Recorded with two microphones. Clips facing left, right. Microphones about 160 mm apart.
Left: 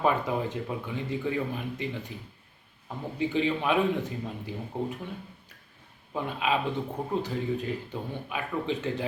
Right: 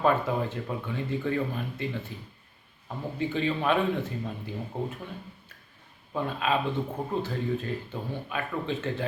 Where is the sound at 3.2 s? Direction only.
15° left (ahead or behind).